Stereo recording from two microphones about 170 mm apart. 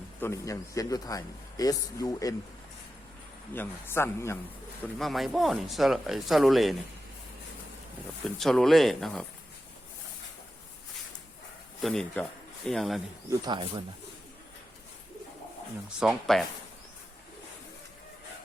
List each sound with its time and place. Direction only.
0.2 s speech: 15° left (ahead or behind)
3.5 s speech: 15° left (ahead or behind)
4.9 s speech: centre (ahead or behind)
8.2 s speech: centre (ahead or behind)
11.8 s speech: centre (ahead or behind)
13.4 s speech: 30° right (ahead or behind)
16.0 s speech: centre (ahead or behind)